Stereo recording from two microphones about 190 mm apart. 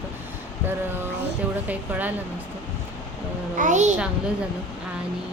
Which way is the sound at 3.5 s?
40° right (ahead or behind).